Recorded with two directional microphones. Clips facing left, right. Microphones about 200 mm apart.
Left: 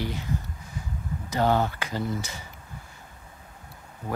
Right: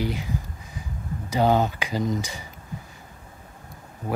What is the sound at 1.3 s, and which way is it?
Speech, 15° right (ahead or behind).